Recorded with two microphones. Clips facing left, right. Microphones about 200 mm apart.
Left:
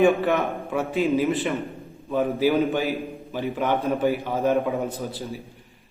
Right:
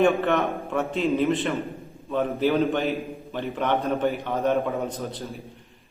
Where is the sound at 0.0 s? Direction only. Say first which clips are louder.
Left 1 dB; centre (ahead or behind).